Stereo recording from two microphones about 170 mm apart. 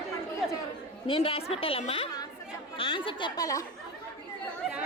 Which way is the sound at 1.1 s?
30° left (ahead or behind).